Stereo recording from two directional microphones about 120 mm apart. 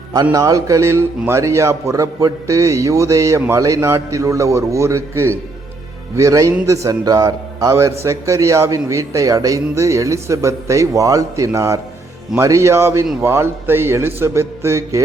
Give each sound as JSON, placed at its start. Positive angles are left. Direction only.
{"t": 0.1, "sound": "a man's voice", "side_deg": -30}